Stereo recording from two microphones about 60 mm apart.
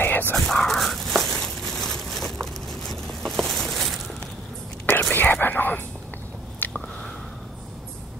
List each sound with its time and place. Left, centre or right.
0.0 s dog: left
0.4 s dog: centre
1.8 s a sound: centre
5.1 s whispering: left
6.6 s biting: left